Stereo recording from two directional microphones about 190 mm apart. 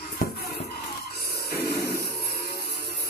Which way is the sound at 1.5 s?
55° left (ahead or behind).